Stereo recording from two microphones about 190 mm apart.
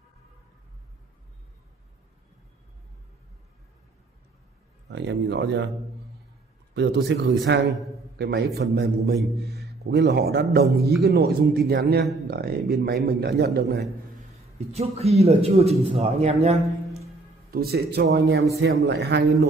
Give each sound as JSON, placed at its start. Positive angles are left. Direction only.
{"t": 4.8, "sound": "a man's voice", "side_deg": -65}
{"t": 6.7, "sound": "a man's voice", "side_deg": -65}
{"t": 8.2, "sound": "a man's voice", "side_deg": -60}
{"t": 14.7, "sound": "a man's voice", "side_deg": -35}
{"t": 17.5, "sound": "a man's voice", "side_deg": -55}